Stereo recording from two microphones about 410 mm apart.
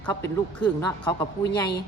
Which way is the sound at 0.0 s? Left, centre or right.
Centre.